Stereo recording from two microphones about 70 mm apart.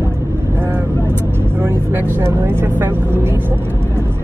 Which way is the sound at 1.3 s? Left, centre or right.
Right.